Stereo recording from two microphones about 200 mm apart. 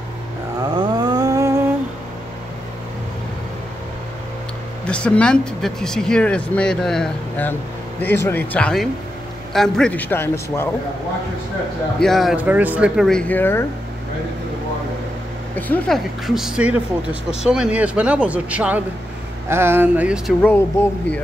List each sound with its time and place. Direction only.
0.7 s a sound: 20° right (ahead or behind)
4.8 s a man's voice: 5° left (ahead or behind)
12.0 s speech: centre (ahead or behind)
15.5 s speech: 5° left (ahead or behind)